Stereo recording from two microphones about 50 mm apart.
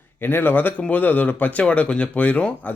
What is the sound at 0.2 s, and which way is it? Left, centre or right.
Speech, left.